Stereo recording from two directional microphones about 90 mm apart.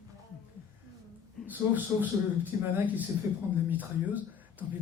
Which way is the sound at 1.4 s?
20° right (ahead or behind).